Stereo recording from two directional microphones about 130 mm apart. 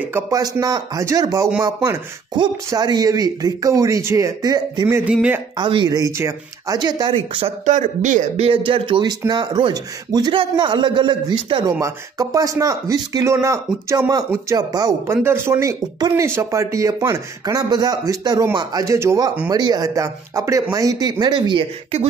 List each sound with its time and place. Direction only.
0.1 s a man's voice: 25° right (ahead or behind)
4.8 s speech: 20° right (ahead or behind)
5.6 s a man's voice: 35° right (ahead or behind)
7.6 s speech: 65° right (ahead or behind)
8.5 s a man's voice: 45° right (ahead or behind)
11.6 s a man's voice: 25° right (ahead or behind)